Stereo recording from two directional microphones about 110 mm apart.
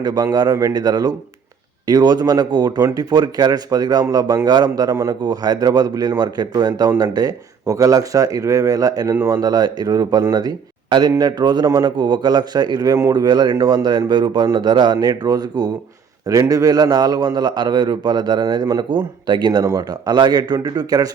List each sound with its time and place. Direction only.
0.0 s a man's voice: 35° right (ahead or behind)